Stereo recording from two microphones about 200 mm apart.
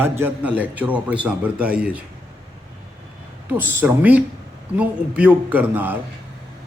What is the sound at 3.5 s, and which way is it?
Speech, 10° right (ahead or behind).